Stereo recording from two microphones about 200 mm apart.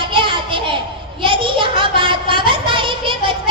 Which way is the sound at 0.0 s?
25° right (ahead or behind).